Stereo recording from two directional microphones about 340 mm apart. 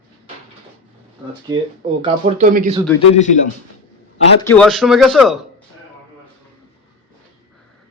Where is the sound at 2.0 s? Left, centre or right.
Centre.